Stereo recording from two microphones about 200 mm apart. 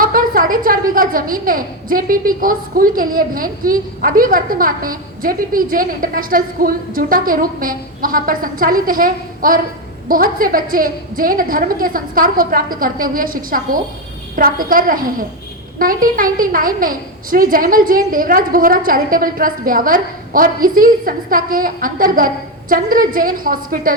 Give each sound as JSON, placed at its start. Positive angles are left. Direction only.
{"t": 0.0, "sound": "a woman's voice", "side_deg": -45}